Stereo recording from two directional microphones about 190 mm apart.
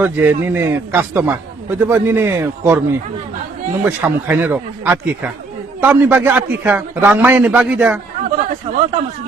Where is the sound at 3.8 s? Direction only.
10° right (ahead or behind).